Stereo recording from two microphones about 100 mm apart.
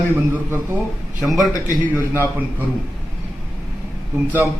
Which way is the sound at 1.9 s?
20° right (ahead or behind).